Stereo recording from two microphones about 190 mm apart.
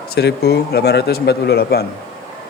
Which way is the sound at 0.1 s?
55° left (ahead or behind).